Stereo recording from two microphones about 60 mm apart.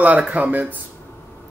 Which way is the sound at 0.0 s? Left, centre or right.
Right.